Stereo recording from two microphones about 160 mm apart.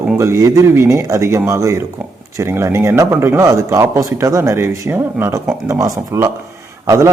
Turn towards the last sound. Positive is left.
turn(degrees=-20)  # may be behind; listen again after turning